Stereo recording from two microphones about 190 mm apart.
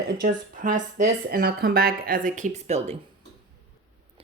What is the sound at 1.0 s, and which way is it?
Speech, 55° right (ahead or behind).